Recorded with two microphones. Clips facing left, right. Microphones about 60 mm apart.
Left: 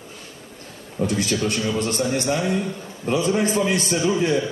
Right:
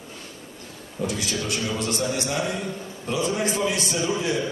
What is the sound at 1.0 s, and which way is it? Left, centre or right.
A man's voice, left.